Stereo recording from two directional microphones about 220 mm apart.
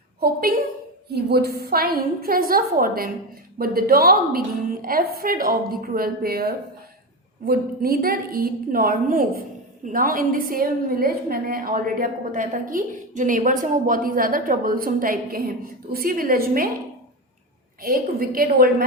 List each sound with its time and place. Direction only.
0.2 s a woman's voice: 40° right (ahead or behind)
17.8 s a woman's voice: 40° right (ahead or behind)